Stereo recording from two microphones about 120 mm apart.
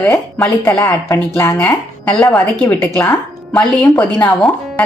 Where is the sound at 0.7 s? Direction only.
20° left (ahead or behind).